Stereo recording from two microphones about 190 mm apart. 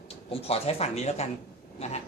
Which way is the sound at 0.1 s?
30° left (ahead or behind).